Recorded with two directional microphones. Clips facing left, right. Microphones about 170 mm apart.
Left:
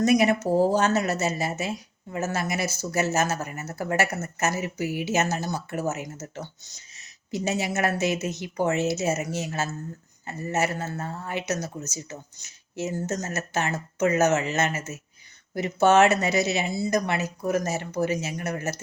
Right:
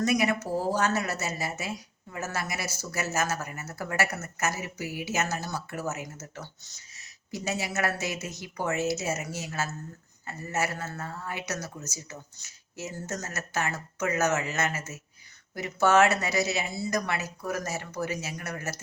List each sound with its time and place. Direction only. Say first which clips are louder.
0.0 s speech: left 6 dB; 25° left (ahead or behind)